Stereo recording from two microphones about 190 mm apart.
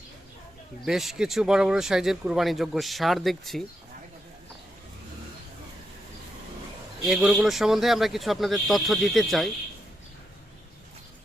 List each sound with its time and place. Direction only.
0.9 s speech: centre (ahead or behind)
7.0 s speech: centre (ahead or behind)